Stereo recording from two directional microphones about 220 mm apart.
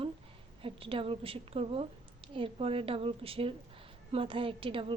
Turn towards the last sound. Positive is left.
turn(degrees=-25)  # may be behind; listen again after turning